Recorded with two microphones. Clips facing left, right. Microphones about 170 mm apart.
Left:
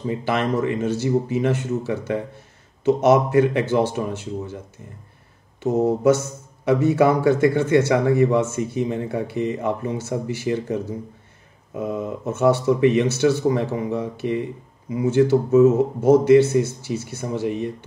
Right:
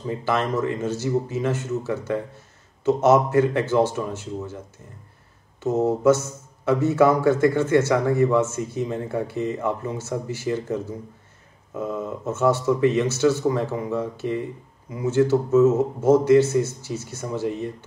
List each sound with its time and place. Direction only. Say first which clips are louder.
0.1 s speech: left 1 dB; 15° left (ahead or behind)
5.6 s a man's voice: left 2 dB; 15° left (ahead or behind)